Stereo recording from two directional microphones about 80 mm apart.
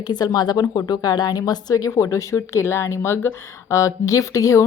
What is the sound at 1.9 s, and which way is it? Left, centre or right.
A woman's voice, left.